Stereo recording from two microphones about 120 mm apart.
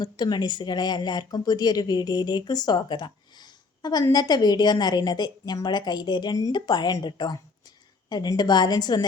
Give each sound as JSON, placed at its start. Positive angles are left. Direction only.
{"t": 0.0, "sound": "speech", "side_deg": 40}